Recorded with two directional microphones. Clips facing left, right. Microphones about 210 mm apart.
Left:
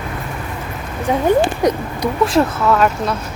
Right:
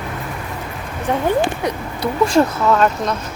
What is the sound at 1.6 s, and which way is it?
Speech, 40° left (ahead or behind).